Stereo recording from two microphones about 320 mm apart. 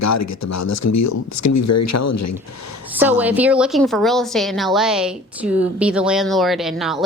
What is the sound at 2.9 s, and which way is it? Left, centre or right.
A woman's voice, centre.